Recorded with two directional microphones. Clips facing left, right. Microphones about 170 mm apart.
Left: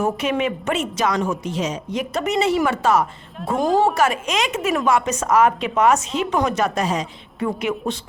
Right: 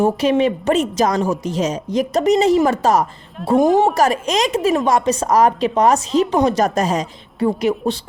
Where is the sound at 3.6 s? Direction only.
20° right (ahead or behind).